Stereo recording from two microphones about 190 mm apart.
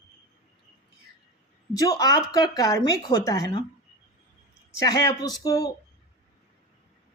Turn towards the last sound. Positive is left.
turn(degrees=20)  # may be behind; listen again after turning